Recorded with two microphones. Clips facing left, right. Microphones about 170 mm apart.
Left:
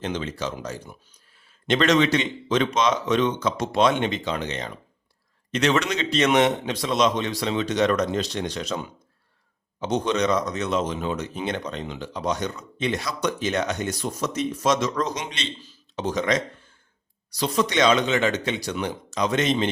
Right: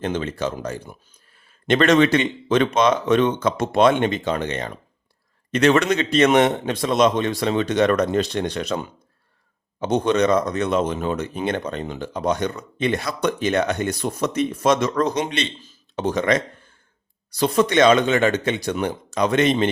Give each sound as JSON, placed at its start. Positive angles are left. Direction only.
{"t": 0.0, "sound": "speech", "side_deg": -55}
{"t": 9.8, "sound": "speech", "side_deg": -55}